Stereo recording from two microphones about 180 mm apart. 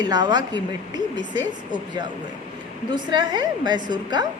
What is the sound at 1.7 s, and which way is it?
A woman's voice, 25° right (ahead or behind).